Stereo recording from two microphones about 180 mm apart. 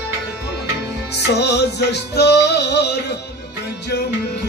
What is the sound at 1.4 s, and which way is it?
Music, 70° left (ahead or behind).